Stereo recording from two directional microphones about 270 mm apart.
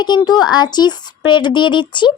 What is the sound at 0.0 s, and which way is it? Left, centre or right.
Speech, centre.